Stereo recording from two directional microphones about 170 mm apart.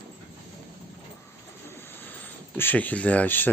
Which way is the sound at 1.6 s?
10° left (ahead or behind).